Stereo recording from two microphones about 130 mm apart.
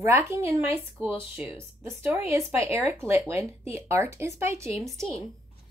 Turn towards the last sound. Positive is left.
turn(degrees=5)  # may be behind; listen again after turning